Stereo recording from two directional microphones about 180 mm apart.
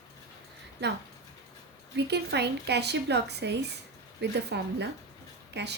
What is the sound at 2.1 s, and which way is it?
A woman's voice, 70° right (ahead or behind).